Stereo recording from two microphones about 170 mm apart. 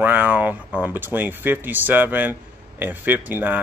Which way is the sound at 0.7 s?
10° right (ahead or behind).